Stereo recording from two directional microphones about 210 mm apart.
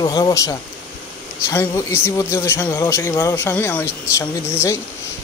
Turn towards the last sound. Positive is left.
turn(degrees=15)  # may be behind; listen again after turning